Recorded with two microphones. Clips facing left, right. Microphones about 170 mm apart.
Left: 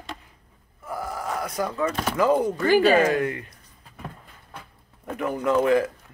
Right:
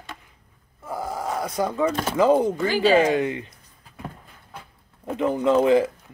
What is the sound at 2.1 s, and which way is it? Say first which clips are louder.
Speech: right 2 dB; 20° right (ahead or behind).